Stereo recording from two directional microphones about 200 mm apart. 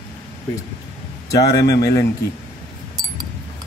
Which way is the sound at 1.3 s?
15° left (ahead or behind).